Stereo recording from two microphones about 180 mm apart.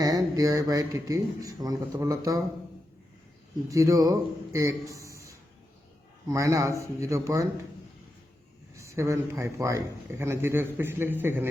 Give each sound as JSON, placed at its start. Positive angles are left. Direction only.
{"t": 0.0, "sound": "a man's voice", "side_deg": -20}
{"t": 3.7, "sound": "a man's voice", "side_deg": -20}
{"t": 8.7, "sound": "a man's voice", "side_deg": -15}